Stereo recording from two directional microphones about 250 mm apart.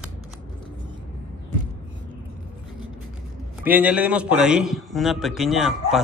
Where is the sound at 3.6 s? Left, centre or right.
Centre.